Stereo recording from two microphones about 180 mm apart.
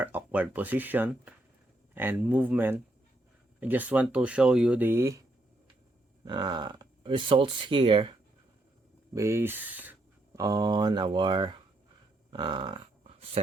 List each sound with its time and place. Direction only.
0.0 s speech: 10° right (ahead or behind)
6.2 s speech: 25° right (ahead or behind)
9.1 s speech: 15° right (ahead or behind)
10.4 s speech: 20° right (ahead or behind)
12.3 s a sound: 25° right (ahead or behind)